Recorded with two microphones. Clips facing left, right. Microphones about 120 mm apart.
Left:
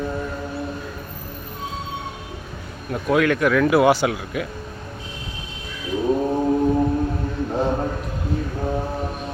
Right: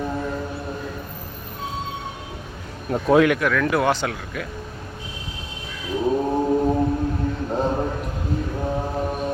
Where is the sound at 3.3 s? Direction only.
5° left (ahead or behind).